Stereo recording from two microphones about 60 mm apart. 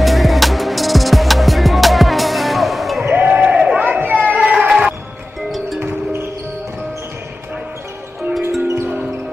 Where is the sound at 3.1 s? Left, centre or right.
Right.